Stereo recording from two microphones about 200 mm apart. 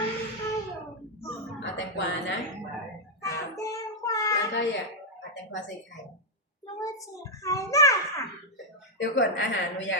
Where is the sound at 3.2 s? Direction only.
15° left (ahead or behind).